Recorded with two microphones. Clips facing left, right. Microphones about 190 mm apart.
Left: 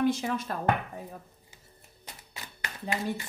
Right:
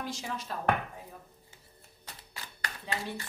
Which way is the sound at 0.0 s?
55° left (ahead or behind).